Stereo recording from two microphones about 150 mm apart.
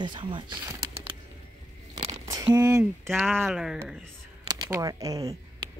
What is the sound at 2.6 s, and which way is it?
Speech, 25° right (ahead or behind).